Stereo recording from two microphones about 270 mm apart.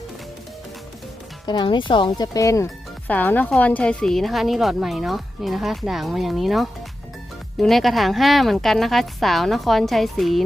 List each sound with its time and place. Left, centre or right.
1.5 s a woman's voice: centre